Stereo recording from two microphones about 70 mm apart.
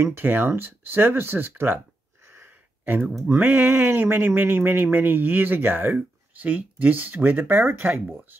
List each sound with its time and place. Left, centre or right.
0.0 s speech: right
2.2 s a sound: right
2.8 s speech: right